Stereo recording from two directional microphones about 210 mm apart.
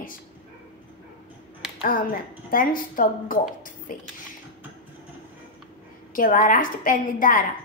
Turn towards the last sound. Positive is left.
turn(degrees=40)  # may be behind; listen again after turning